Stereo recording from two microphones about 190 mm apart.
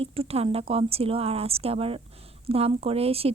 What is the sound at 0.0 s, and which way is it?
Speech, 30° right (ahead or behind).